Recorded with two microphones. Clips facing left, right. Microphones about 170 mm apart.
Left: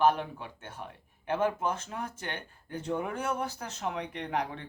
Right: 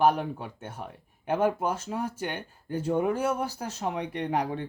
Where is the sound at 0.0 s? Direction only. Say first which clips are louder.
Right 2 dB; 10° right (ahead or behind).